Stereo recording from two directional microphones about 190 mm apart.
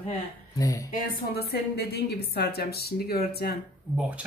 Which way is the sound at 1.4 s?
55° left (ahead or behind).